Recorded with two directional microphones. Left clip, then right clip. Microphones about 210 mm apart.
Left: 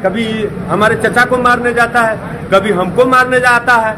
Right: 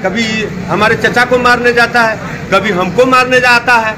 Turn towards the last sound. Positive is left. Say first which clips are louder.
# right 1 dB
turn(degrees=5)  # may be behind; listen again after turning